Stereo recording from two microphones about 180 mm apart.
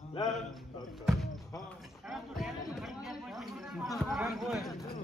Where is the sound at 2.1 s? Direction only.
Centre (ahead or behind).